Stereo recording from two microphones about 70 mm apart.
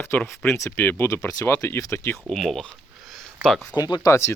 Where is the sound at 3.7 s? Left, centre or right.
Left.